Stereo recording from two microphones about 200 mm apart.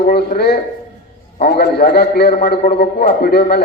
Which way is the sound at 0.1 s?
50° left (ahead or behind).